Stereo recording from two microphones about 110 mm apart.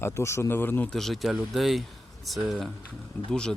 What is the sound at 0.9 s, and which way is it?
Speech, 5° left (ahead or behind).